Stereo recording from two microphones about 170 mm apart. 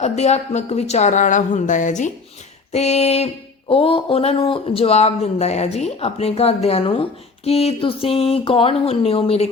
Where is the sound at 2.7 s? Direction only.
40° left (ahead or behind).